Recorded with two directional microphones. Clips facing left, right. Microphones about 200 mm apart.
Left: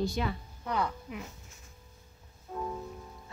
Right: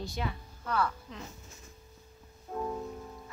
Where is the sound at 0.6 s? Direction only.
15° left (ahead or behind).